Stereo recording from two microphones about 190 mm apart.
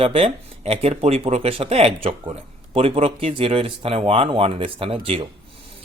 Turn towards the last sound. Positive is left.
turn(degrees=-30)  # may be behind; listen again after turning